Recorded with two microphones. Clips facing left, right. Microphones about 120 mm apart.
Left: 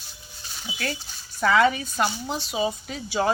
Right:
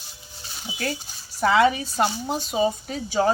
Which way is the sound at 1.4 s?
25° right (ahead or behind).